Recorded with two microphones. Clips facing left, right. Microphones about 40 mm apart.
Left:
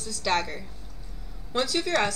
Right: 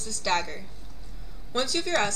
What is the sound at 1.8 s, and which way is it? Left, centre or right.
Speech, centre.